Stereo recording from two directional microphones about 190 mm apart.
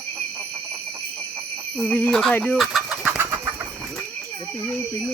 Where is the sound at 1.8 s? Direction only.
5° left (ahead or behind); by 3.4 s 10° right (ahead or behind).